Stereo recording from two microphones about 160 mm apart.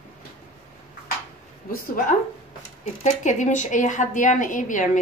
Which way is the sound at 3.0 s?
50° left (ahead or behind).